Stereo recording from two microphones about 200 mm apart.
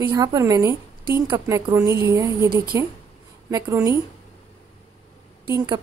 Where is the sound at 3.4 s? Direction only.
15° right (ahead or behind).